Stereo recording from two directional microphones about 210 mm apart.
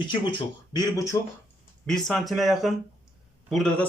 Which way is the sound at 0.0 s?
20° left (ahead or behind).